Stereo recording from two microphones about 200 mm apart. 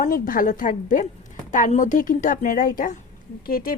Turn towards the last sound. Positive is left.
turn(degrees=45)  # may be behind; listen again after turning